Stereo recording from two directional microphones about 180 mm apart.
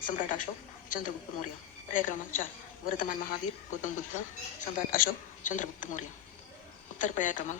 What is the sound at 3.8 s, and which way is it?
A woman's voice, 45° left (ahead or behind).